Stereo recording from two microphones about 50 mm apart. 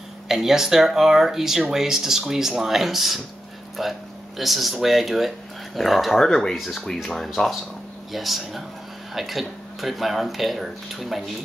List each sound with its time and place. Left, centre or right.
0.3 s speech: centre
7.4 s speech: centre
8.1 s speech: centre